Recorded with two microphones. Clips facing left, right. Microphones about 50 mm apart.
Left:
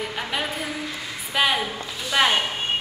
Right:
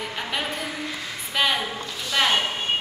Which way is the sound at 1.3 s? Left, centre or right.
Centre.